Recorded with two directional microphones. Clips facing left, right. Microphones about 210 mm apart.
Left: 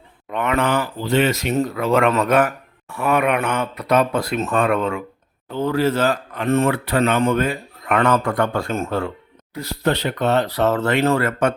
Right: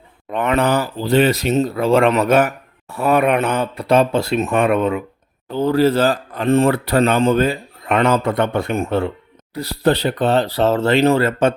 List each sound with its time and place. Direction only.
0.3 s speech: 35° right (ahead or behind)
2.9 s speech: 35° right (ahead or behind); by 5.0 s 20° right (ahead or behind)
5.5 s speech: 35° right (ahead or behind)